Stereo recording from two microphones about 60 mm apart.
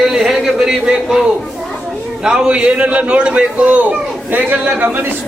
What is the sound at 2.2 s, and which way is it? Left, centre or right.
A man's voice, centre.